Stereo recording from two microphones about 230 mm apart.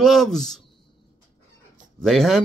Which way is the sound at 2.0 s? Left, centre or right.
Centre.